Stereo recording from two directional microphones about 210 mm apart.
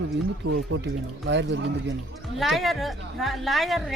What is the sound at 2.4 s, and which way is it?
Speech, centre (ahead or behind).